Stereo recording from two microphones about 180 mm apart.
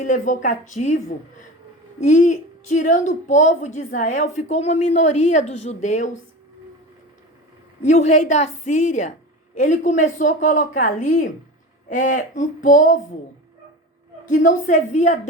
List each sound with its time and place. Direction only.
0.1 s a woman's voice: 45° left (ahead or behind)
7.9 s a woman's voice: 40° left (ahead or behind)
14.3 s speech: 45° left (ahead or behind)